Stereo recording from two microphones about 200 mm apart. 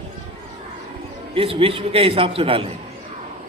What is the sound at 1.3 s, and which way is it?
A man's voice, 25° right (ahead or behind).